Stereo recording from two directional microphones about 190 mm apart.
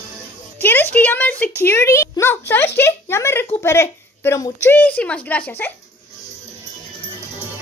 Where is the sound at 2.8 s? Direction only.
15° left (ahead or behind).